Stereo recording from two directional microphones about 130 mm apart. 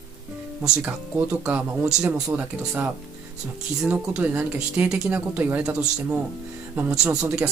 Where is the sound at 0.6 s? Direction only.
15° right (ahead or behind).